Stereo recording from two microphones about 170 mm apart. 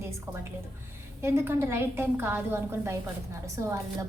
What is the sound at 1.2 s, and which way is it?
A woman's voice, 15° right (ahead or behind).